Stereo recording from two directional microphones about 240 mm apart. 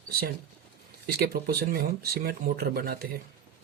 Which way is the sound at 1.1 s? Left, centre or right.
Right.